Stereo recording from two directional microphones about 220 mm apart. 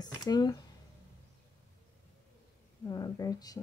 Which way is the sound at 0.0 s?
20° left (ahead or behind).